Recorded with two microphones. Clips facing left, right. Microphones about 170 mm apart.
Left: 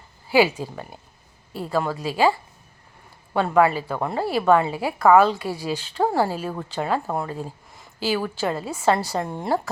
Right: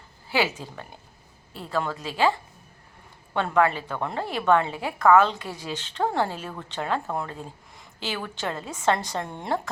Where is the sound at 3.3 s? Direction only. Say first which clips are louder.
Left 4 dB; 5° left (ahead or behind).